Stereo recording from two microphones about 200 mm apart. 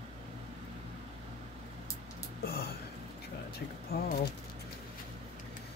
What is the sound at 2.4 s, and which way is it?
Speech, 50° left (ahead or behind).